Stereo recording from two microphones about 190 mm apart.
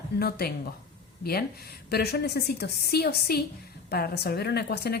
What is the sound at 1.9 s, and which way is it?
A woman's voice, 60° left (ahead or behind).